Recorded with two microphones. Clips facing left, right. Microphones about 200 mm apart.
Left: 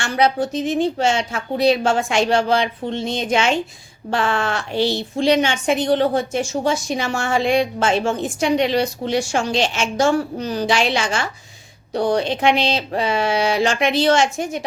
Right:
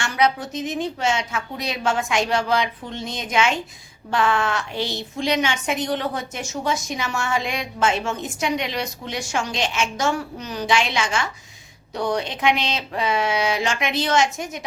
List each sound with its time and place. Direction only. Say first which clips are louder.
0.0 s speech: left 3 dB; 30° left (ahead or behind)